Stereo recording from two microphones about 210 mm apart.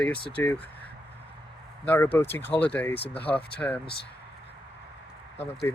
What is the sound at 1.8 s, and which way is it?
Speech, 10° left (ahead or behind).